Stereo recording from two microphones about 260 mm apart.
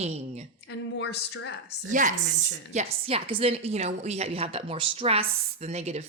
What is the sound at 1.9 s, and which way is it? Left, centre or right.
A woman's voice, right.